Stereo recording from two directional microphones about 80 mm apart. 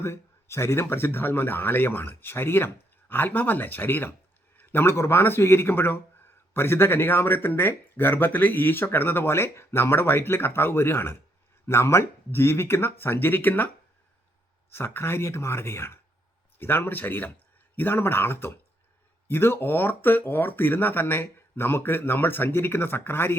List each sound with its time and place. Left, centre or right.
0.0 s speech: left
14.7 s speech: left